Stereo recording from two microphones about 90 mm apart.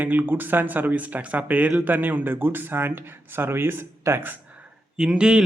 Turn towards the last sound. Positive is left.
turn(degrees=-10)  # may be behind; listen again after turning